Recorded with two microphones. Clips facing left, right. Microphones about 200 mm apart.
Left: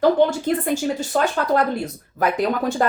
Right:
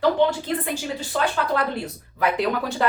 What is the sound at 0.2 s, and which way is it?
Speech, 45° left (ahead or behind).